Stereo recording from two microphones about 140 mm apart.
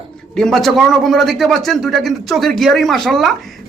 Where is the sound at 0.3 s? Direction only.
5° left (ahead or behind).